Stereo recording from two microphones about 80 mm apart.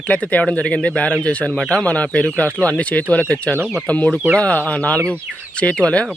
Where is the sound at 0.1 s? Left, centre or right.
Centre.